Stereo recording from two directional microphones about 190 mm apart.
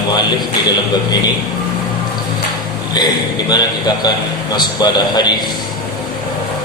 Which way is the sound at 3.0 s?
20° left (ahead or behind).